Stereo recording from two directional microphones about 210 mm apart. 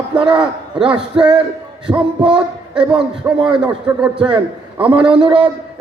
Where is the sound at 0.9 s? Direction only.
5° right (ahead or behind).